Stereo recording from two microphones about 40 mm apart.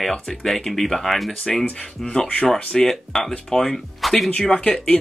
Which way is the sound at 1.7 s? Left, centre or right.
Left.